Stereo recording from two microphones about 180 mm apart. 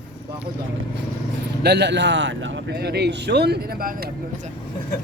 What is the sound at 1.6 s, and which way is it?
A man's voice, 70° right (ahead or behind).